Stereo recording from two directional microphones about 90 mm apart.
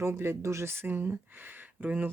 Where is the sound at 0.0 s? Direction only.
30° right (ahead or behind).